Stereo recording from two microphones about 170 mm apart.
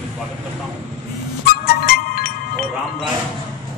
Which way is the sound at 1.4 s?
60° left (ahead or behind).